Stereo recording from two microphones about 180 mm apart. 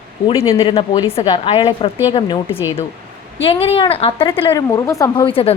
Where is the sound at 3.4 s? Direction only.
30° left (ahead or behind).